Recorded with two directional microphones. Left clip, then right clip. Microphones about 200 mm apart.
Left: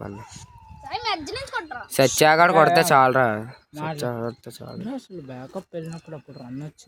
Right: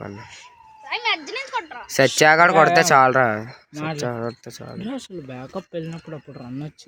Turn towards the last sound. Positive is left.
turn(degrees=-45)  # may be behind; listen again after turning